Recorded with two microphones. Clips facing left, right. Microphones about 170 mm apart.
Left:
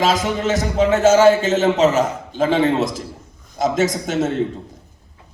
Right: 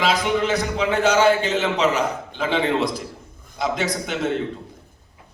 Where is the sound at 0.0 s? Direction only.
45° left (ahead or behind).